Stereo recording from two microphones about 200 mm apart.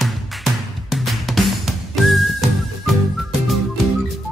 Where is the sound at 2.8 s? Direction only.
Centre (ahead or behind).